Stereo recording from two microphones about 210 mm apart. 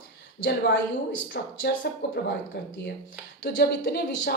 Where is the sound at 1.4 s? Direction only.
50° left (ahead or behind).